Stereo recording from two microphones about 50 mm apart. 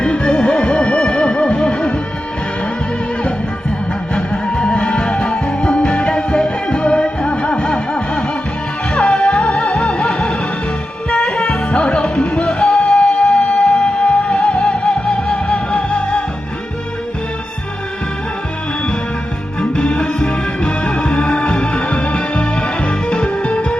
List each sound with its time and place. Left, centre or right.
0.0 s music: centre
4.1 s music: centre
19.7 s music: centre